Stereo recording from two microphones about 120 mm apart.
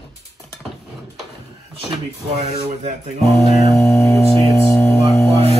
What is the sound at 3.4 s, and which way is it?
Music, 65° left (ahead or behind).